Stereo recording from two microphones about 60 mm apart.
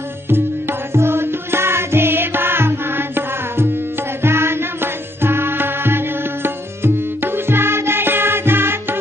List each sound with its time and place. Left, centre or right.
0.3 s music: right